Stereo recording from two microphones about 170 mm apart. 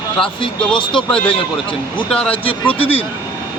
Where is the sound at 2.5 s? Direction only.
30° left (ahead or behind).